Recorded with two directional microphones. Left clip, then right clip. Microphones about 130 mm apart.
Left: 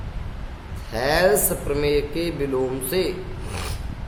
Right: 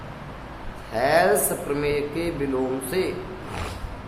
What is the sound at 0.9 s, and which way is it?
Speech, 45° left (ahead or behind).